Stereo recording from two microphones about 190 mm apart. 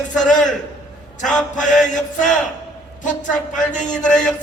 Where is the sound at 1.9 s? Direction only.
40° left (ahead or behind).